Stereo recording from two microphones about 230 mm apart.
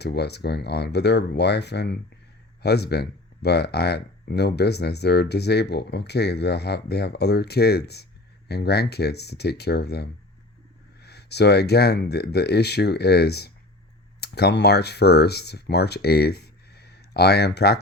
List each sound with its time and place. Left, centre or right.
0.0 s speech: left